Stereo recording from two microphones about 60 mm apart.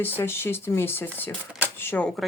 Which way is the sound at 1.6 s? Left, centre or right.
Left.